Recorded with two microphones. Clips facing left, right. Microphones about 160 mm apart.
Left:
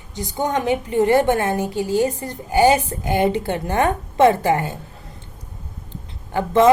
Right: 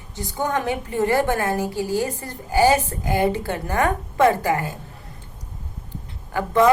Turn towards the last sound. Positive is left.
turn(degrees=25)  # may be behind; listen again after turning